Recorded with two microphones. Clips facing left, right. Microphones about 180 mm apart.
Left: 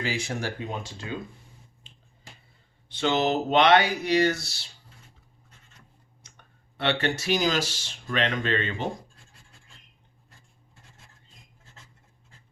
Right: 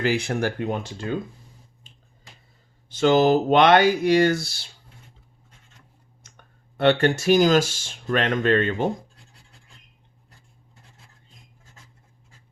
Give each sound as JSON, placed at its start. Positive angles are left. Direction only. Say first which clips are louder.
{"t": 0.0, "sound": "speech", "louder": "right 7 dB", "side_deg": -60}
{"t": 2.9, "sound": "speech", "louder": "right 7 dB", "side_deg": -45}
{"t": 6.7, "sound": "speech", "louder": "right 8 dB", "side_deg": -50}